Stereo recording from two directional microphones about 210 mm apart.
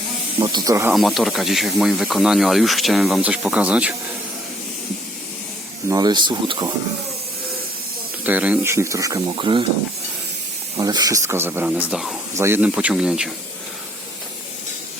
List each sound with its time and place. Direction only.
0.3 s speech: 20° right (ahead or behind)
0.9 s speech: centre (ahead or behind)
5.9 s speech: 20° right (ahead or behind)
8.2 s speech: 5° right (ahead or behind); by 9.6 s 25° right (ahead or behind)
10.8 s speech: 15° right (ahead or behind)